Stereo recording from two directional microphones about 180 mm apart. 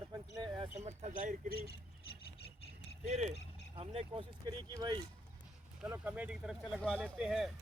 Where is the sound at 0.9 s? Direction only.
40° right (ahead or behind).